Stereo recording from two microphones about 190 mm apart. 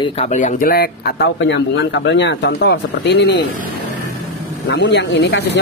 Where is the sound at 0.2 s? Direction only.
40° left (ahead or behind); by 3.4 s 65° left (ahead or behind).